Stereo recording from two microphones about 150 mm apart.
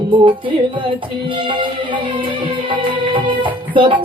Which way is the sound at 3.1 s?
35° right (ahead or behind).